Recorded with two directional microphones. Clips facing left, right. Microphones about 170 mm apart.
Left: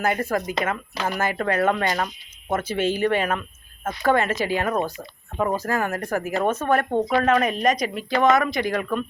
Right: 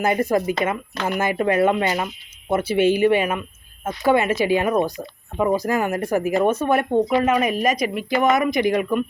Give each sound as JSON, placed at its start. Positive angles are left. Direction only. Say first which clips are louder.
{"t": 0.0, "sound": "speech", "louder": "right 4 dB", "side_deg": -15}